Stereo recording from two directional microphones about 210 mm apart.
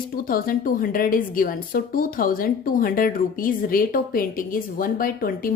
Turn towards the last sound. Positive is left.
turn(degrees=40)  # may be behind; listen again after turning